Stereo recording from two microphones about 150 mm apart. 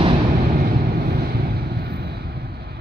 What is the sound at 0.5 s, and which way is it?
Vehicle, 70° right (ahead or behind).